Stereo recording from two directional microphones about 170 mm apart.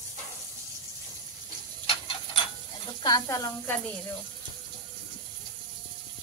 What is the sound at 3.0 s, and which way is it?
Speech, 20° left (ahead or behind).